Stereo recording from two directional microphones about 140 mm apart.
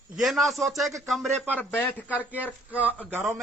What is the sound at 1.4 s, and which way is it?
Speech, 10° left (ahead or behind).